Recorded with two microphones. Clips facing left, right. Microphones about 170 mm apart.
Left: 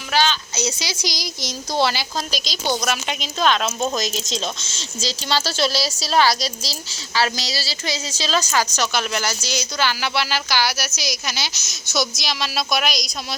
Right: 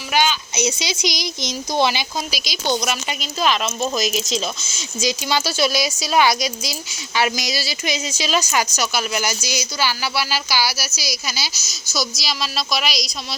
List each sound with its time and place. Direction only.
0.1 s a woman's voice: 15° right (ahead or behind)